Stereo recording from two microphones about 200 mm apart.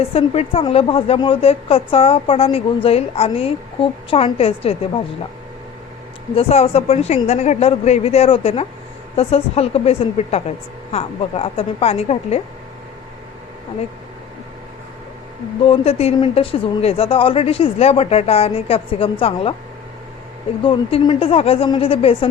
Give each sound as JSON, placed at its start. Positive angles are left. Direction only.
{"t": 0.0, "sound": "speech", "side_deg": 30}
{"t": 6.3, "sound": "a woman's voice", "side_deg": 30}
{"t": 15.7, "sound": "speech", "side_deg": 30}
{"t": 20.7, "sound": "speech", "side_deg": 25}